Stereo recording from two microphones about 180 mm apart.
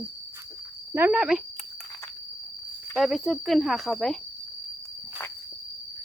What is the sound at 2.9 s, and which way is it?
Speech, centre (ahead or behind).